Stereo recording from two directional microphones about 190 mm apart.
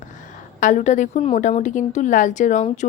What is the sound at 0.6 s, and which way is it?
Speech, 40° left (ahead or behind).